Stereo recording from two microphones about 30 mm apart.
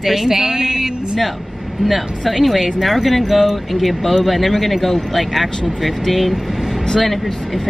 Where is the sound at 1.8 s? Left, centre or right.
Centre.